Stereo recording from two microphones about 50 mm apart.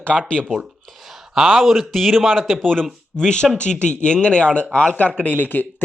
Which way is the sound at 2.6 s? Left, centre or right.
Centre.